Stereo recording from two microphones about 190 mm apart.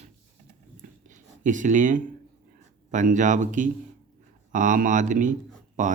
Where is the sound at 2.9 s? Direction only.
40° right (ahead or behind).